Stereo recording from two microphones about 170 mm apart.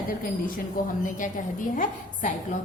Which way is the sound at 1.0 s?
50° left (ahead or behind).